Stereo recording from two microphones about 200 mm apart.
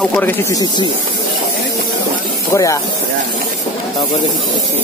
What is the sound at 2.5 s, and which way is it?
Speech, 15° left (ahead or behind).